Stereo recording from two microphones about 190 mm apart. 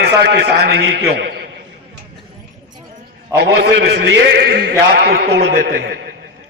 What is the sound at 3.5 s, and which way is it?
A man's voice, 60° right (ahead or behind).